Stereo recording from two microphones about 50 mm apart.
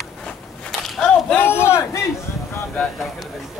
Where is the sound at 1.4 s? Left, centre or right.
Left.